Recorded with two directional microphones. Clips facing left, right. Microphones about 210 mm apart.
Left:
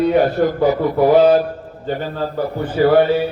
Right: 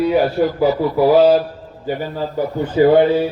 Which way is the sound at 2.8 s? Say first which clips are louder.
Right 1 dB; 25° right (ahead or behind).